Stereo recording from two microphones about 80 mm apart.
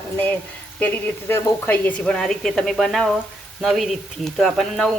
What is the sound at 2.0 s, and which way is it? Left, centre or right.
Speech, centre.